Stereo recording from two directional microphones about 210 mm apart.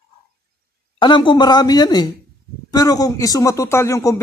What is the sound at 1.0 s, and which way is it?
Speech, 20° left (ahead or behind).